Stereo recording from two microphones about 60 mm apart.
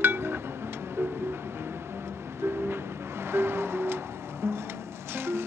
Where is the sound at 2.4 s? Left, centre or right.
Right.